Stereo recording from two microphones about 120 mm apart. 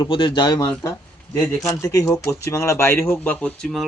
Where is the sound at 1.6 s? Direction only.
25° left (ahead or behind).